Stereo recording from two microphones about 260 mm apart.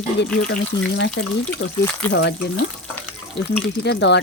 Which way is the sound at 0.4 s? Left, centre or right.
Left.